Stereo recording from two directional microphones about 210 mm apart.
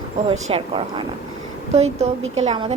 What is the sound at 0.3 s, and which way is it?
A woman's voice, 30° right (ahead or behind).